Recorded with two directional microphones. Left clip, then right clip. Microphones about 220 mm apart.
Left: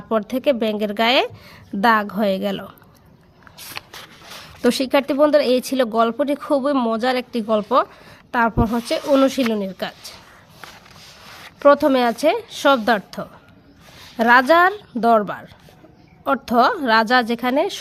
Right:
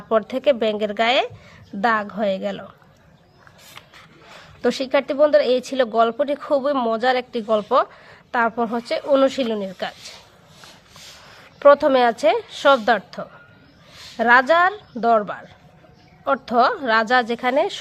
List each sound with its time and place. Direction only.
0.1 s speech: 25° left (ahead or behind)
4.6 s speech: 40° left (ahead or behind)
11.6 s speech: 30° left (ahead or behind)